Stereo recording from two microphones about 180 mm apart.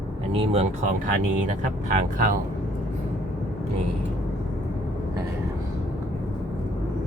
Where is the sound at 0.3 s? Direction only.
35° right (ahead or behind).